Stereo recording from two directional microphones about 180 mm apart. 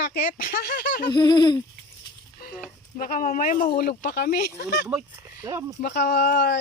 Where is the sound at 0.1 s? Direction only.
55° left (ahead or behind).